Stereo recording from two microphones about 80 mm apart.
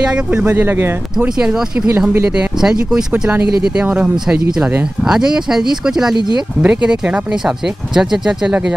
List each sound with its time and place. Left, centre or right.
0.1 s speech: centre
1.4 s speech: centre
3.1 s speech: right